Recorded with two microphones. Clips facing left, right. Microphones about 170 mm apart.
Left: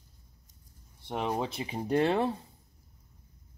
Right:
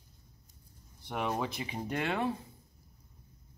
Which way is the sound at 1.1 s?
30° left (ahead or behind).